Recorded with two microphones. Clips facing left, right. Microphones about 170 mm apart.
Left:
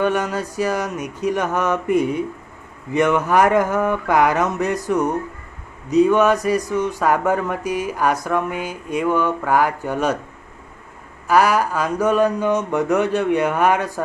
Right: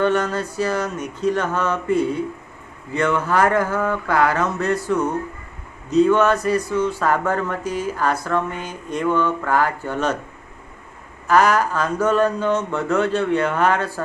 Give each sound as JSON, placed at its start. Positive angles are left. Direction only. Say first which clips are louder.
{"t": 0.0, "sound": "speech", "louder": "right 1 dB", "side_deg": 15}
{"t": 11.3, "sound": "speech", "louder": "even", "side_deg": 10}